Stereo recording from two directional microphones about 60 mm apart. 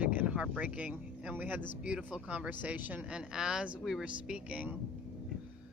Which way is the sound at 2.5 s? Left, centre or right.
Right.